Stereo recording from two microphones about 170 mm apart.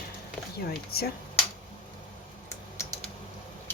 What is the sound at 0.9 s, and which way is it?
Speech, 65° left (ahead or behind).